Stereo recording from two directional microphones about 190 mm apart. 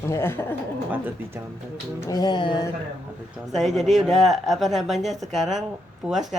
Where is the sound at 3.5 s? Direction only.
Centre (ahead or behind).